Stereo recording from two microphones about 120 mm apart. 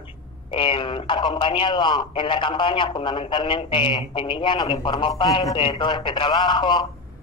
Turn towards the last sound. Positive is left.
turn(degrees=35)  # may be behind; listen again after turning